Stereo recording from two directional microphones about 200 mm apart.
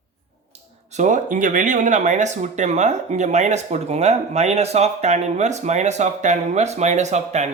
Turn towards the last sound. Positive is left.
turn(degrees=-35)  # may be behind; listen again after turning